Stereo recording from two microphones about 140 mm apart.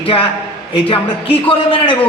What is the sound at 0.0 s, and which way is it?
A man's voice, 40° left (ahead or behind).